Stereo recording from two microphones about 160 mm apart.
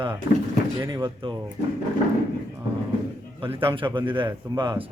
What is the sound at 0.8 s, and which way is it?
Speech, 20° right (ahead or behind).